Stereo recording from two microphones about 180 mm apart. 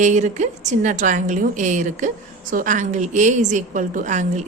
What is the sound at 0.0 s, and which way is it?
A woman's voice, 40° right (ahead or behind).